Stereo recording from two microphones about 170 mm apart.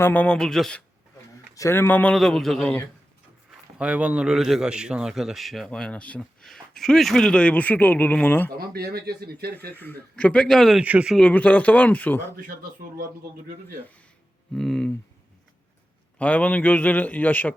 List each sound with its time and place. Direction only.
0.0 s a man's voice: 10° left (ahead or behind)
1.5 s a man's voice: 15° left (ahead or behind)
3.8 s a man's voice: 10° right (ahead or behind); by 8.4 s 10° left (ahead or behind)
8.4 s speech: 65° right (ahead or behind)
9.7 s a man's voice: 10° left (ahead or behind); by 11.2 s 5° right (ahead or behind)
11.2 s a man's voice: 10° left (ahead or behind)
14.5 s a man's voice: centre (ahead or behind)
16.1 s a man's voice: 10° left (ahead or behind)